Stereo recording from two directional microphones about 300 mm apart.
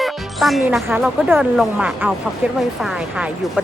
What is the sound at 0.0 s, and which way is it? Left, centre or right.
Speech, centre.